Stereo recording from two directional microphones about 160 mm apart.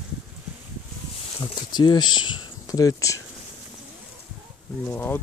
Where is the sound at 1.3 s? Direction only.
25° left (ahead or behind).